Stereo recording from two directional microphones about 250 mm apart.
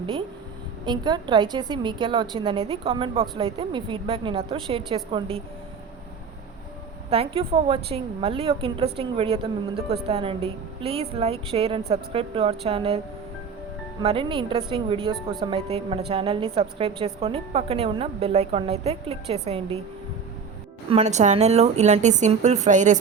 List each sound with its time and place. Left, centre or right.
0.9 s a woman's voice: centre
7.1 s a woman's voice: right
14.0 s a woman's voice: right
20.9 s a woman's voice: right